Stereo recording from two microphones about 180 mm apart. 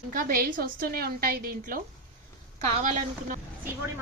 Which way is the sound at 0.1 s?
50° right (ahead or behind).